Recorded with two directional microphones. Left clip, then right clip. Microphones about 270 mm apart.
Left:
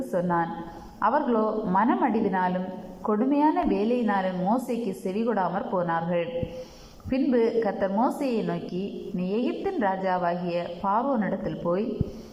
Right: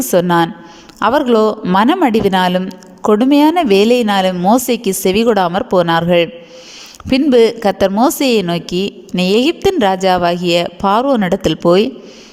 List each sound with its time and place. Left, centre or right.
0.1 s a woman's voice: right